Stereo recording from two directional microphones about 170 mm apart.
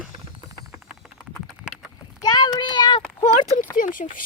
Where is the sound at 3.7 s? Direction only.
50° left (ahead or behind).